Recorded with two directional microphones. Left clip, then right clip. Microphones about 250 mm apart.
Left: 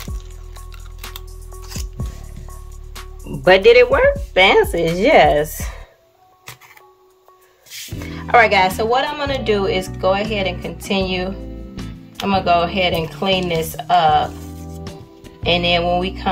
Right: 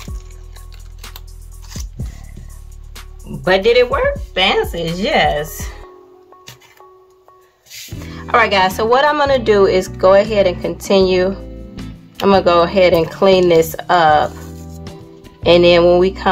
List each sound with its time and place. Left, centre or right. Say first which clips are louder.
1.0 s music: left 2 dB; centre
3.3 s speech: left 3 dB; centre
8.0 s speech: left 1 dB; centre
11.3 s music: right 1 dB; centre
12.3 s speech: right 5 dB; centre
14.4 s music: even; centre
15.4 s speech: right 7 dB; centre